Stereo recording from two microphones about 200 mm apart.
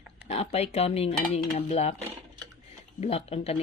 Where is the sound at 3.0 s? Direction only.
30° left (ahead or behind).